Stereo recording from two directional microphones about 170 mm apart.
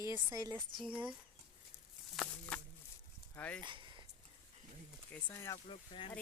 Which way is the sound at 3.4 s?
10° left (ahead or behind).